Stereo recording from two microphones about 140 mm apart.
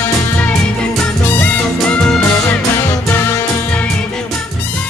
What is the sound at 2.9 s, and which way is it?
Music, 20° left (ahead or behind).